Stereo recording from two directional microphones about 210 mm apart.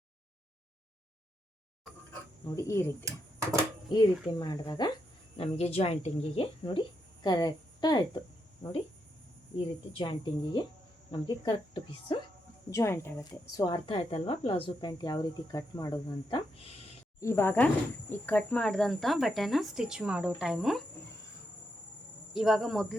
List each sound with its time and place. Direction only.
2.6 s speech: 15° left (ahead or behind)
3.0 s speech: 15° right (ahead or behind)
3.8 s speech: 20° left (ahead or behind)
5.4 s speech: 30° left (ahead or behind)
9.9 s speech: 25° left (ahead or behind)
17.2 s speech: 10° left (ahead or behind)
22.3 s speech: centre (ahead or behind)